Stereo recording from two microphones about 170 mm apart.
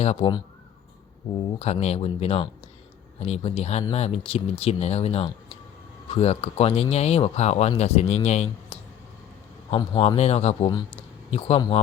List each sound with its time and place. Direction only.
0.0 s speech: 35° left (ahead or behind)
1.5 s speech: 35° left (ahead or behind)
10.7 s speech: 25° left (ahead or behind)
11.3 s speech: 35° left (ahead or behind)